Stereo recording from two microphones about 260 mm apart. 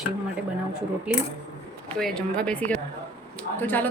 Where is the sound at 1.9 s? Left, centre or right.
Centre.